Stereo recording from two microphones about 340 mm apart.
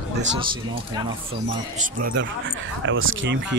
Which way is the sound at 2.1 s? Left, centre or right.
Right.